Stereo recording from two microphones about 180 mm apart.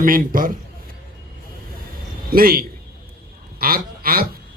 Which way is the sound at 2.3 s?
55° right (ahead or behind).